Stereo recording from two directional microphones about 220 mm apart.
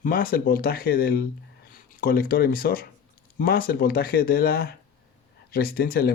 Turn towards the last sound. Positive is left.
turn(degrees=45)  # may be behind; listen again after turning